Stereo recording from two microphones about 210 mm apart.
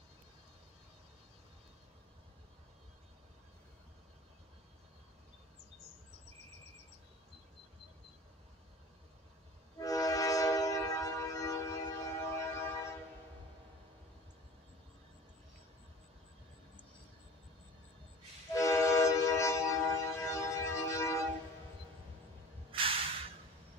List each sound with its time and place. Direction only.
9.8 s train: 15° left (ahead or behind)
18.5 s train: 15° left (ahead or behind)
22.7 s a sound: 25° right (ahead or behind)